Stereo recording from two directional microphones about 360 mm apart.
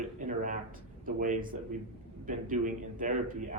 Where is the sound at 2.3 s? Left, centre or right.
Right.